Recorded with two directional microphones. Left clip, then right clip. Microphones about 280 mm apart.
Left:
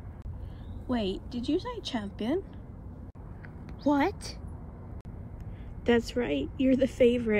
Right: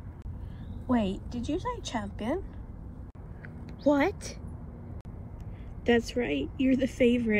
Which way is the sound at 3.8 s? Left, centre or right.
Centre.